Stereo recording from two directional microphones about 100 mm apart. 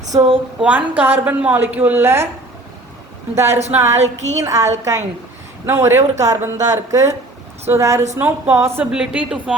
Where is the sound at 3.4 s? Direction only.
90° right.